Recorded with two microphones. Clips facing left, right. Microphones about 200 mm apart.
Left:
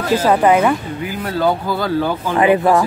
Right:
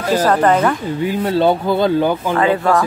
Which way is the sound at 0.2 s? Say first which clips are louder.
Left 1 dB; 10° left (ahead or behind).